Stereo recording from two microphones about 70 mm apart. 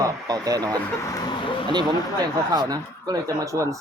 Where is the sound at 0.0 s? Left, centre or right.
Right.